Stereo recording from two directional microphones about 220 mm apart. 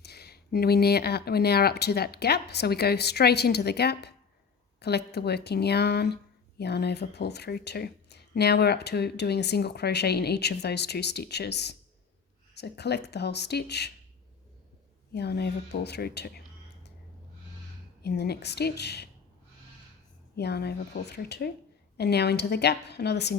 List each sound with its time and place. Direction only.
0.0 s speech: 45° left (ahead or behind)
15.1 s speech: 50° left (ahead or behind)
18.0 s speech: 45° left (ahead or behind)
20.3 s speech: 45° left (ahead or behind)